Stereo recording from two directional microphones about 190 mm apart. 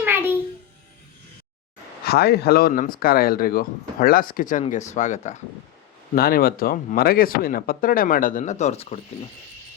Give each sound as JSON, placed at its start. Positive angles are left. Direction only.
{"t": 0.0, "sound": "a sound", "side_deg": -10}
{"t": 2.0, "sound": "speech", "side_deg": 55}
{"t": 6.1, "sound": "speech", "side_deg": 50}